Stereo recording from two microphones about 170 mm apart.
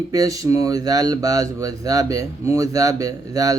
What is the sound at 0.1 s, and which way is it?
Speech, 20° right (ahead or behind).